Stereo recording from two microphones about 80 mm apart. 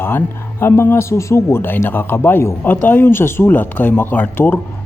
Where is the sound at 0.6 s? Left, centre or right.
Left.